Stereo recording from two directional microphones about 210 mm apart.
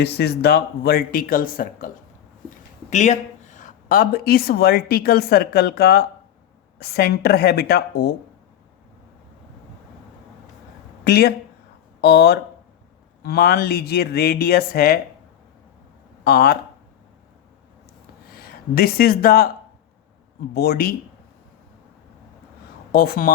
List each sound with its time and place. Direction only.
0.0 s speech: 50° left (ahead or behind)
2.9 s speech: 35° left (ahead or behind); by 8.1 s 50° left (ahead or behind)
11.0 s speech: 50° left (ahead or behind)
16.2 s speech: 45° left (ahead or behind)
18.3 s speech: 45° left (ahead or behind)
20.5 s speech: 45° left (ahead or behind)
22.9 s speech: 45° left (ahead or behind)